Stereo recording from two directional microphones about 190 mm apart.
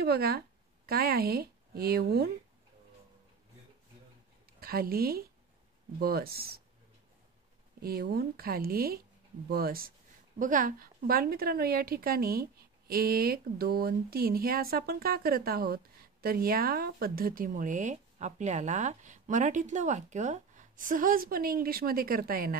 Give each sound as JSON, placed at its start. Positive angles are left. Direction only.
{"t": 0.0, "sound": "speech", "side_deg": -55}
{"t": 4.6, "sound": "a woman's voice", "side_deg": -50}
{"t": 7.8, "sound": "a woman's voice", "side_deg": -55}